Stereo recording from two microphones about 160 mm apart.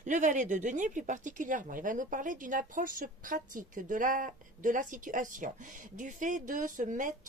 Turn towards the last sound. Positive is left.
turn(degrees=-50)  # may be behind; listen again after turning